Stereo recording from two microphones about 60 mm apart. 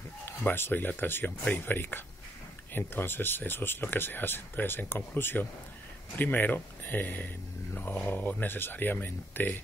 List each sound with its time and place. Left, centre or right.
0.2 s speech: left